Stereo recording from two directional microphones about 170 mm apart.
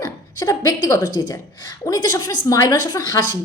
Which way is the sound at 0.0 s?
20° left (ahead or behind).